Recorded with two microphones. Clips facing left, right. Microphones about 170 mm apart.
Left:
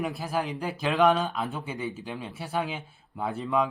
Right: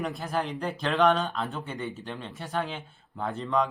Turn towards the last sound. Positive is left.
turn(degrees=5)  # may be behind; listen again after turning